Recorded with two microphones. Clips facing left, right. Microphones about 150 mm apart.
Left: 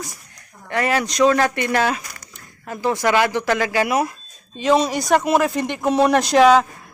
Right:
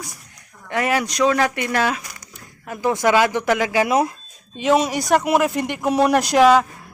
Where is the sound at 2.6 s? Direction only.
20° right (ahead or behind).